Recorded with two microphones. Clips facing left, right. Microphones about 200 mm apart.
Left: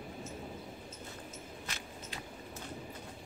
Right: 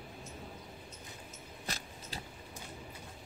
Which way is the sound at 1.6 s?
35° right (ahead or behind).